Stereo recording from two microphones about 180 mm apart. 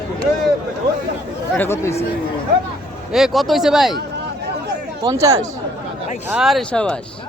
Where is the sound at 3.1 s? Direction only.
Centre (ahead or behind).